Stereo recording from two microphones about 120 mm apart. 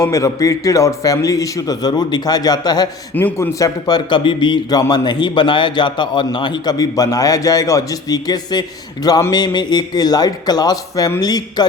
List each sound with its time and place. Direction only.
0.0 s a man's voice: 25° left (ahead or behind)
3.2 s a man's voice: 15° left (ahead or behind)
3.6 s a man's voice: 35° left (ahead or behind)